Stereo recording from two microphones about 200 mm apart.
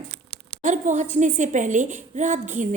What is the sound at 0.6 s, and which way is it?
A woman's voice, 35° right (ahead or behind).